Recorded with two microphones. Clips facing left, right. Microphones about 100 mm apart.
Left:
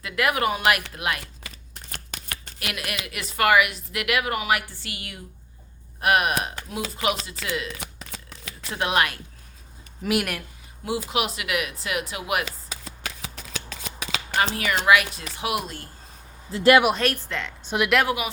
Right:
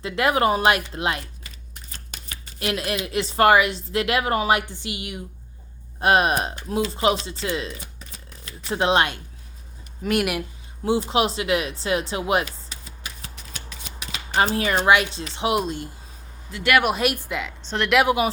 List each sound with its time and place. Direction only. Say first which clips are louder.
0.0 s speech: right 3 dB; 30° right (ahead or behind)
1.2 s shuffling cards: left 1 dB; 70° left (ahead or behind)
2.6 s speech: right 7 dB; 30° right (ahead or behind)
7.8 s shuffling cards: left 4 dB; 80° left
8.7 s speech: right 4 dB; 25° right (ahead or behind)
10.0 s speech: right 2 dB; centre (ahead or behind)
10.8 s speech: right 5 dB; 30° right (ahead or behind)
12.5 s shuffling cards: left 4 dB; 90° left
14.5 s speech: right 1 dB; 30° right (ahead or behind)
16.5 s speech: left 6 dB; 35° left (ahead or behind)
17.0 s speech: right 2 dB; 15° right (ahead or behind)
17.7 s speech: left 2 dB; 10° left (ahead or behind)